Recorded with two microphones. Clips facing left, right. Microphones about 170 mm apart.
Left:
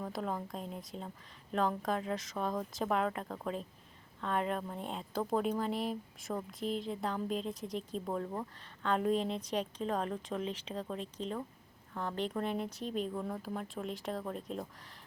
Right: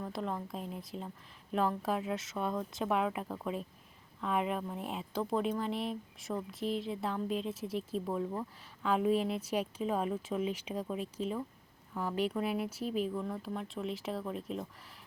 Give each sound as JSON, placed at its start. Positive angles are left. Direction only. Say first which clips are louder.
{"t": 0.0, "sound": "a woman's voice", "louder": "even", "side_deg": 0}